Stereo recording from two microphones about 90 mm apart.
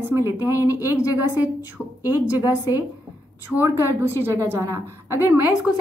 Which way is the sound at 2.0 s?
20° right (ahead or behind).